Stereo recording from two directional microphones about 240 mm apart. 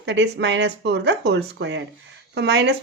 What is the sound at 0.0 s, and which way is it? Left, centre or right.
Speech, right.